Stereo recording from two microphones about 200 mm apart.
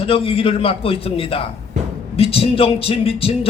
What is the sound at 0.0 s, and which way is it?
A man's voice, 30° left (ahead or behind).